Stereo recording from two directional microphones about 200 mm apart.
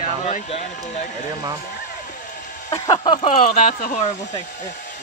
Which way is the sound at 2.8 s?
20° left (ahead or behind).